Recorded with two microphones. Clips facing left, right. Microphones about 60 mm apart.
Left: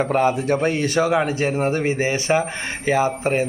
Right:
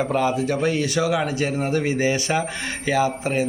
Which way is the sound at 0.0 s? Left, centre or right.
Left.